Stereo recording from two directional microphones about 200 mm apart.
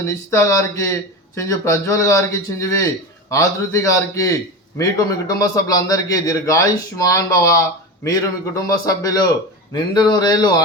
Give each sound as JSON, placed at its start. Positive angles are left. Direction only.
{"t": 0.0, "sound": "a man's voice", "side_deg": 15}